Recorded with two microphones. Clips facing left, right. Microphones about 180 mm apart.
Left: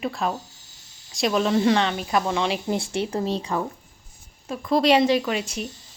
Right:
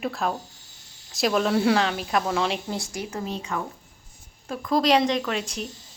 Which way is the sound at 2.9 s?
30° left (ahead or behind).